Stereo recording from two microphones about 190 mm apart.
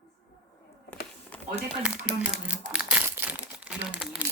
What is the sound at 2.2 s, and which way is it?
Crumpling, 5° right (ahead or behind).